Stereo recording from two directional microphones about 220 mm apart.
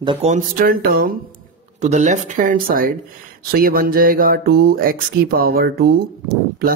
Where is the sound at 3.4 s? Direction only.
40° right (ahead or behind).